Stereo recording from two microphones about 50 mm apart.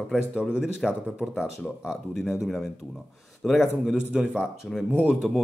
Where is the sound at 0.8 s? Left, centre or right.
Centre.